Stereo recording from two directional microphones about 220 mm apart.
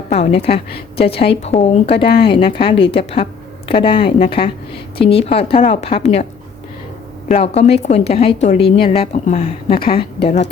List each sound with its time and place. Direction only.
0.1 s a woman's voice: 30° left (ahead or behind)
7.3 s a woman's voice: 30° left (ahead or behind)